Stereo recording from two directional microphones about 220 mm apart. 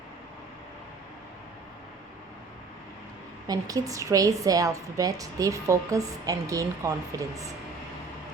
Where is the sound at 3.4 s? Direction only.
15° right (ahead or behind).